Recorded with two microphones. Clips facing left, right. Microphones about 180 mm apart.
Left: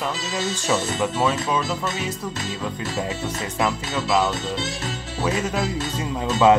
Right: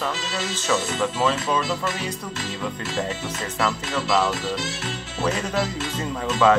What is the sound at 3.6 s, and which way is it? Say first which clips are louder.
Speech: left 1 dB; 15° left (ahead or behind).